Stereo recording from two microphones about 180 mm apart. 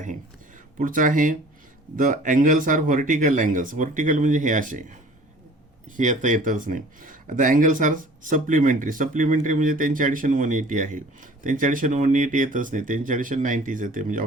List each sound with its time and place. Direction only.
0.8 s speech: 45° right (ahead or behind)
6.0 s speech: 45° right (ahead or behind)